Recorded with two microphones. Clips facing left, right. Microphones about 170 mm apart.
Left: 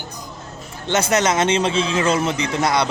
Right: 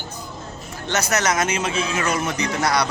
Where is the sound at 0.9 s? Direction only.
25° left (ahead or behind).